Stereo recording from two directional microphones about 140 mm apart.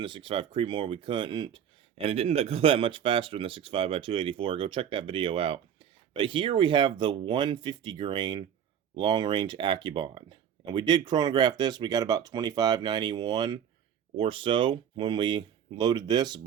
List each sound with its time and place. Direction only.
0.0 s speech: 40° right (ahead or behind)